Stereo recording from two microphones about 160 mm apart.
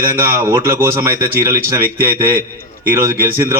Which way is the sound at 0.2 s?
15° right (ahead or behind).